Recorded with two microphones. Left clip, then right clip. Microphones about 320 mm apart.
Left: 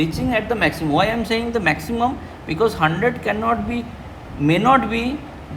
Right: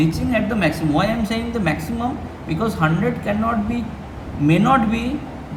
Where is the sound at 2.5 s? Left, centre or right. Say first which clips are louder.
Left 3 dB; left.